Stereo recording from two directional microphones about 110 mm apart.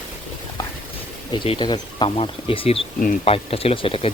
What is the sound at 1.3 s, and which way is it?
Speech, 50° left (ahead or behind).